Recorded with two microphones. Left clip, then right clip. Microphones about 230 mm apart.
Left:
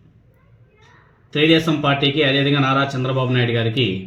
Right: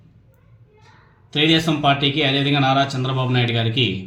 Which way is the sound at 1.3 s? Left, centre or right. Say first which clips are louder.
Left 2 dB; centre.